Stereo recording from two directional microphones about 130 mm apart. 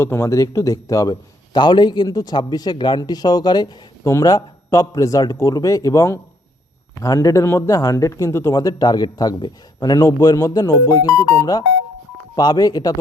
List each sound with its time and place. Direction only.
0.0 s a man's voice: 20° left (ahead or behind)